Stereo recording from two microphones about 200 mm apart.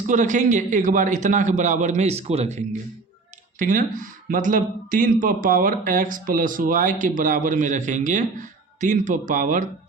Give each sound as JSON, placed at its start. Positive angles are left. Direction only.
{"t": 0.1, "sound": "speech", "side_deg": -40}
{"t": 3.6, "sound": "speech", "side_deg": -40}